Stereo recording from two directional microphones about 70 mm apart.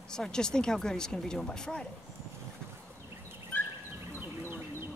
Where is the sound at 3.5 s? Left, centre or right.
Left.